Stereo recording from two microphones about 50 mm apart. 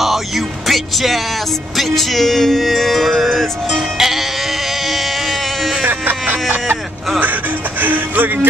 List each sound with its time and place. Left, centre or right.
0.7 s music: centre
4.8 s a sound: centre
5.9 s vehicle: right
7.8 s music: right